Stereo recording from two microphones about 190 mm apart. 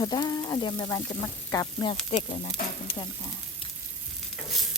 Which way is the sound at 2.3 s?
35° left (ahead or behind).